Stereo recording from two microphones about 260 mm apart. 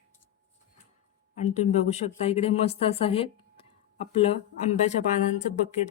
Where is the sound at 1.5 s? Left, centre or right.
Left.